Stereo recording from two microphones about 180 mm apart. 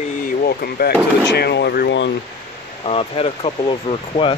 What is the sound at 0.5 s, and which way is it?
Speech, 55° left (ahead or behind).